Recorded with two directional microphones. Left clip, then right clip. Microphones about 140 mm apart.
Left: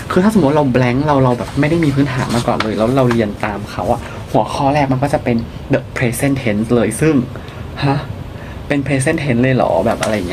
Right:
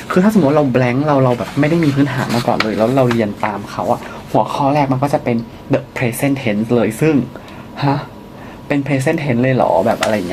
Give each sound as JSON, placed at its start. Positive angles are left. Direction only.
{"t": 0.1, "sound": "speech", "side_deg": 15}